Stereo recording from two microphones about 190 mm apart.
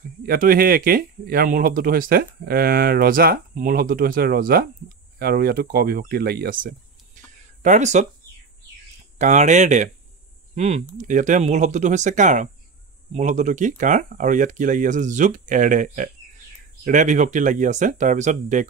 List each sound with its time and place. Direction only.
0.0 s speech: 50° right (ahead or behind)
7.2 s a sound: 40° right (ahead or behind)
7.6 s speech: 40° right (ahead or behind)
9.2 s speech: 40° right (ahead or behind)